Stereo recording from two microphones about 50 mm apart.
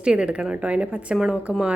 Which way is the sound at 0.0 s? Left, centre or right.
Right.